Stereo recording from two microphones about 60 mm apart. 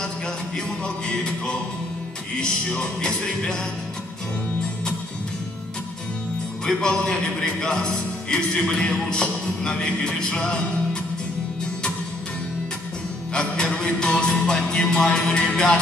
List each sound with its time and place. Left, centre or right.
0.8 s a man's voice: centre
6.6 s a man's voice: centre
13.3 s a man's voice: centre